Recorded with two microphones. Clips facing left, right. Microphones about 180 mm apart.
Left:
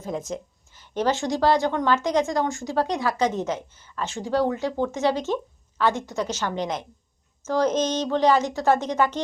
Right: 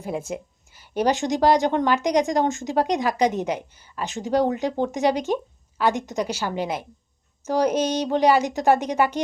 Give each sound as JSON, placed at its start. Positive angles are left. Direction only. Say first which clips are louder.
{"t": 0.3, "sound": "a woman's voice", "louder": "right 1 dB", "side_deg": -10}